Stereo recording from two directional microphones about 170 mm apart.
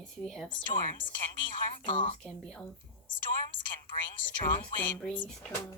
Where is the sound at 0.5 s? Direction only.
30° left (ahead or behind).